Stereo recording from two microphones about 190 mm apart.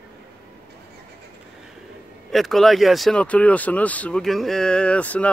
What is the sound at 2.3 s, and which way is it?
Speech, centre (ahead or behind).